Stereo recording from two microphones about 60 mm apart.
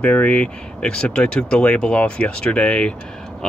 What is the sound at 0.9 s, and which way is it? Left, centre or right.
Speech, centre.